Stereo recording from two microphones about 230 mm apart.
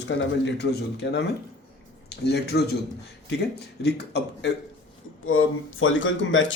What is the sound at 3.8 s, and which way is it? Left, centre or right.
Speech, left.